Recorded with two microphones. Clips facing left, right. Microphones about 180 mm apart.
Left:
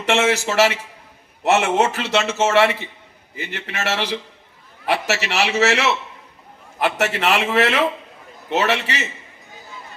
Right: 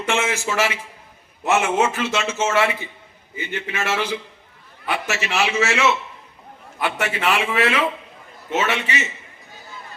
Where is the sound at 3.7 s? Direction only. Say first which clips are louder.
Left 1 dB; 40° left (ahead or behind).